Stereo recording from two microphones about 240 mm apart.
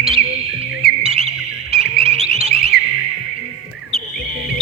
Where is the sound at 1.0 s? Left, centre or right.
Right.